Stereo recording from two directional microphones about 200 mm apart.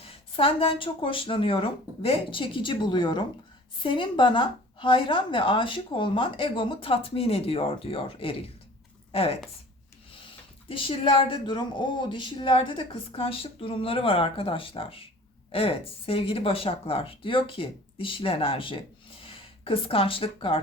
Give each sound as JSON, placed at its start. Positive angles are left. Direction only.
{"t": 0.0, "sound": "speech", "side_deg": 30}
{"t": 10.7, "sound": "speech", "side_deg": 25}